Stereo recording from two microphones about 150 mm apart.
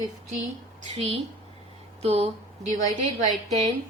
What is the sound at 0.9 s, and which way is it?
A woman's voice, 45° right (ahead or behind).